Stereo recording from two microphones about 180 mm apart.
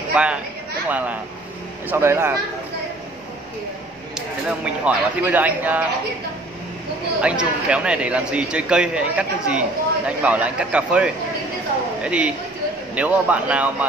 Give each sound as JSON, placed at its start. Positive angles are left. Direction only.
{"t": 0.1, "sound": "speech", "side_deg": -5}
{"t": 4.5, "sound": "speech", "side_deg": -5}
{"t": 7.2, "sound": "a man's voice", "side_deg": -5}